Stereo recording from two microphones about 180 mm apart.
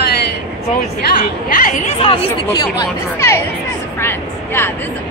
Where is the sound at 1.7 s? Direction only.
35° left (ahead or behind).